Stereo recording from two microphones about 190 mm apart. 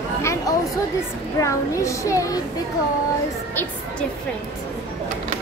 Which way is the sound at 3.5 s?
10° left (ahead or behind).